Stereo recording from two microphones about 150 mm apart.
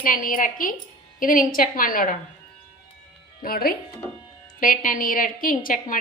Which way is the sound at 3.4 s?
80° left.